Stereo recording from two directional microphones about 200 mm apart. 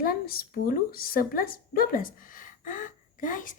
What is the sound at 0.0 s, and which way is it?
Speech, 50° left (ahead or behind).